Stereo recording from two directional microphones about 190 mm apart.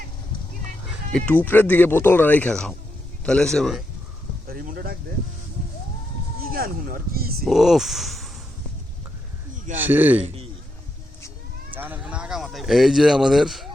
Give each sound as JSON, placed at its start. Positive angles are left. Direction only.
{"t": 1.1, "sound": "a man's voice", "side_deg": 5}
{"t": 4.4, "sound": "speech", "side_deg": -50}
{"t": 6.4, "sound": "speech", "side_deg": -50}
{"t": 7.4, "sound": "speech", "side_deg": 0}
{"t": 9.7, "sound": "speech", "side_deg": -10}
{"t": 11.7, "sound": "speech", "side_deg": -10}